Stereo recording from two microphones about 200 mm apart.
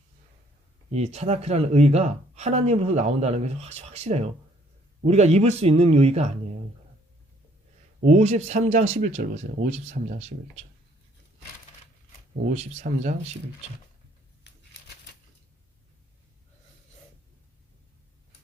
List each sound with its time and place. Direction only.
0.9 s speech: 30° right (ahead or behind)
8.0 s speech: 35° right (ahead or behind)
12.5 s speech: 35° right (ahead or behind)
14.5 s a sound: 55° left (ahead or behind)